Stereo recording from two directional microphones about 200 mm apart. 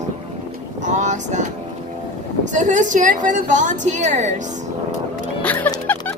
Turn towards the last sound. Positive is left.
turn(degrees=10)  # may be behind; listen again after turning